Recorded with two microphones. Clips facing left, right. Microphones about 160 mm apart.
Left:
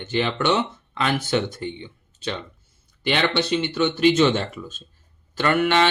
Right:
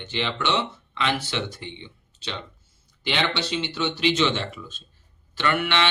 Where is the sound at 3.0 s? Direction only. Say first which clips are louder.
Left 4 dB; 50° left (ahead or behind).